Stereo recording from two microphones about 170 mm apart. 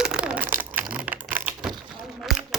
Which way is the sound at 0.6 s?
10° right (ahead or behind).